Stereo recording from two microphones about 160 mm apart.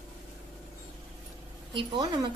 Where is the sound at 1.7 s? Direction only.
30° right (ahead or behind).